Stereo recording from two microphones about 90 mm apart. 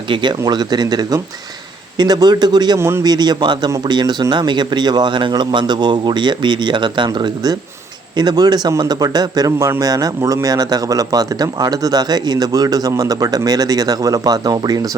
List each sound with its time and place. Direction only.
0.1 s speech: 55° right (ahead or behind)
2.7 s a man's voice: 30° right (ahead or behind)
3.0 s speech: 50° right (ahead or behind)